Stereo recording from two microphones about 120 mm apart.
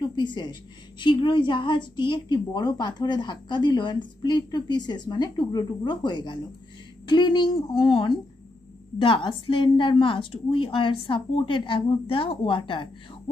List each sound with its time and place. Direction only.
0.0 s a woman's voice: 40° left (ahead or behind)